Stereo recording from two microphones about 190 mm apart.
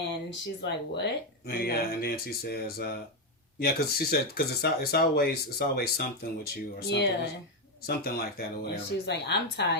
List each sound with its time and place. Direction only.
0.3 s speech: 65° left (ahead or behind)
1.5 s speech: 55° left (ahead or behind)